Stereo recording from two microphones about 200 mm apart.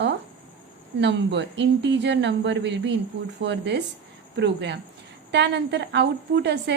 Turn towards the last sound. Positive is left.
turn(degrees=-60)  # may be behind; listen again after turning